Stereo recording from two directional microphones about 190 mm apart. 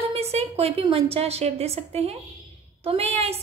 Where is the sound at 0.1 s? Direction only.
30° right (ahead or behind).